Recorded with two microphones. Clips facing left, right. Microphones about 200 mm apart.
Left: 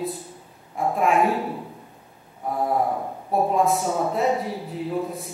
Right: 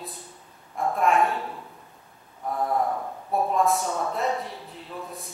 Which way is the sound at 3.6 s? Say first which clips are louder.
Left 3 dB; 5° left (ahead or behind).